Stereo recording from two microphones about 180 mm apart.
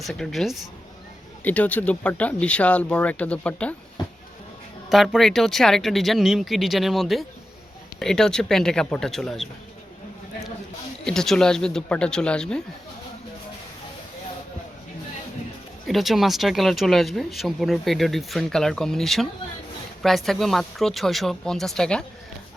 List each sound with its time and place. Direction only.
0.0 s speech: centre (ahead or behind)
4.0 s a sound: 25° left (ahead or behind)
4.9 s speech: centre (ahead or behind)
11.0 s speech: 5° left (ahead or behind)
15.9 s speech: centre (ahead or behind)